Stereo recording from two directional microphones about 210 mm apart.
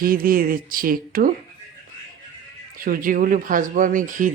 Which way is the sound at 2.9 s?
40° right (ahead or behind).